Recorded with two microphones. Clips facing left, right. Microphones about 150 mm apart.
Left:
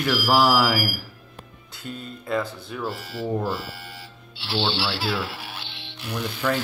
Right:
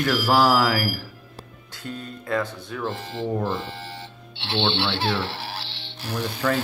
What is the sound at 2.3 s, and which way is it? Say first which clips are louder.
Speech: even; 5° left (ahead or behind).